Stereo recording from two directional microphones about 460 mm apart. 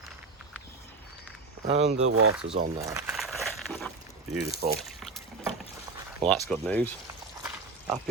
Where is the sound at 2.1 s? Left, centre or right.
Right.